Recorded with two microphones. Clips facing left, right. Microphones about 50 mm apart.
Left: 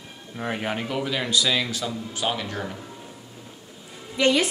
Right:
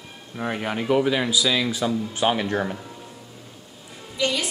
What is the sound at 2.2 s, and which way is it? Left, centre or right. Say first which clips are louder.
Speech: right 5 dB; right.